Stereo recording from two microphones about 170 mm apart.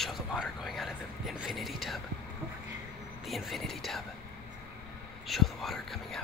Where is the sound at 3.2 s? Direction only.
Centre (ahead or behind).